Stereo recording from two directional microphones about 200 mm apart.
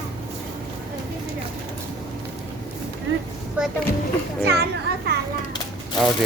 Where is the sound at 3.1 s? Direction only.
75° right (ahead or behind).